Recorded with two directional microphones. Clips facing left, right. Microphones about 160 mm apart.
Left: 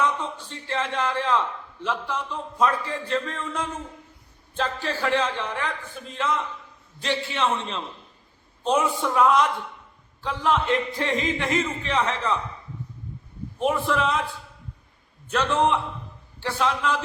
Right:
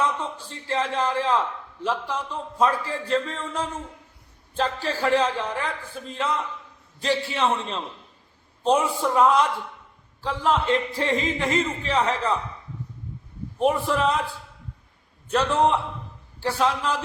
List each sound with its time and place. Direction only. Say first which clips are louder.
0.0 s speech: even; 30° right (ahead or behind)
13.6 s speech: right 2 dB; 35° right (ahead or behind)
15.3 s speech: right 1 dB; 35° right (ahead or behind)